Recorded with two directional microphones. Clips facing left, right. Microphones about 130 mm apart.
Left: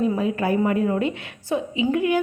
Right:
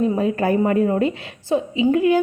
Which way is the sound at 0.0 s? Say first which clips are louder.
Right 3 dB; 40° right (ahead or behind).